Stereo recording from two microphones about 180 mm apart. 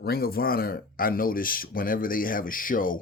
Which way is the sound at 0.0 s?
60° left (ahead or behind).